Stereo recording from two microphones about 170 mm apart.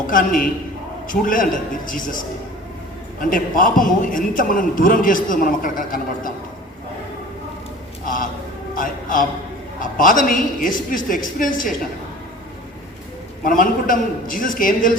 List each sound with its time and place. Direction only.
0.1 s a man's voice: 55° left (ahead or behind)
3.2 s a man's voice: 55° left (ahead or behind)
8.0 s a sound: 50° left (ahead or behind)
8.8 s music: 50° left (ahead or behind)
9.8 s a man's voice: 50° left (ahead or behind)
13.4 s a man's voice: 50° left (ahead or behind)